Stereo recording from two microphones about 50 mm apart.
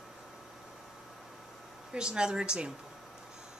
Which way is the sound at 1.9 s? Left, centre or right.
Centre.